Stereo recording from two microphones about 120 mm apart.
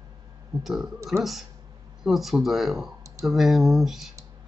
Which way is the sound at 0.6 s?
5° right (ahead or behind).